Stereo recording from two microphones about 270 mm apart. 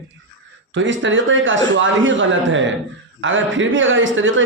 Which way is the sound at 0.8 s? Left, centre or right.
Right.